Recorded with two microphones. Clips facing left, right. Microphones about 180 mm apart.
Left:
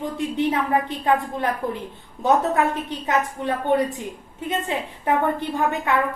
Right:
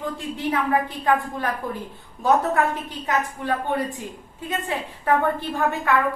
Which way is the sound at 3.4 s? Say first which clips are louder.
Left 4 dB; 20° left (ahead or behind).